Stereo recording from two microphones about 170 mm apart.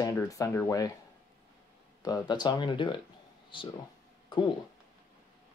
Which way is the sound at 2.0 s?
25° left (ahead or behind).